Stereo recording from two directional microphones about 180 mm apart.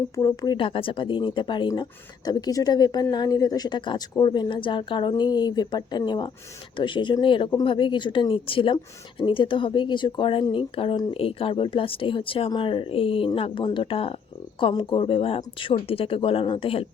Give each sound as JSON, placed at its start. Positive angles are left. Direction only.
{"t": 0.2, "sound": "speech", "side_deg": 20}